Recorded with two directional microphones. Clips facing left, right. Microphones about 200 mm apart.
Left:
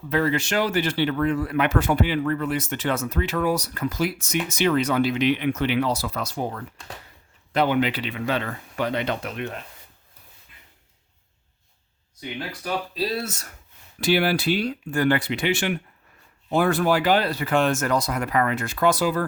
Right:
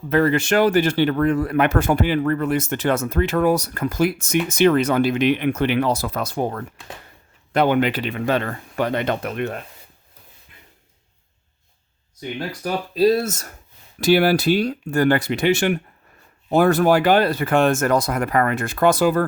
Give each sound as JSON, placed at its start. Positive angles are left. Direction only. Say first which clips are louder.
{"t": 0.1, "sound": "speech", "louder": "right 5 dB", "side_deg": -50}
{"t": 12.2, "sound": "speech", "louder": "right 5 dB", "side_deg": -45}